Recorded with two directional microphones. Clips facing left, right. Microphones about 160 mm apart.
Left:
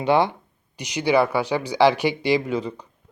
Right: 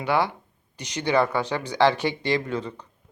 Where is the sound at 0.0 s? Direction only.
20° left (ahead or behind).